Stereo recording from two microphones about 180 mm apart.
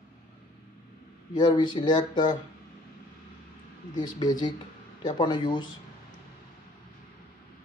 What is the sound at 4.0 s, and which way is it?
Speech, 20° left (ahead or behind).